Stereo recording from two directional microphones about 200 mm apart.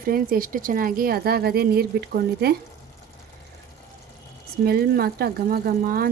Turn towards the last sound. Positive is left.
turn(degrees=-45)  # may be behind; listen again after turning